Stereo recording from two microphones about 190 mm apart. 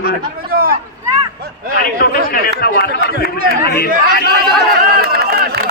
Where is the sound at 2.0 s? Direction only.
50° left (ahead or behind).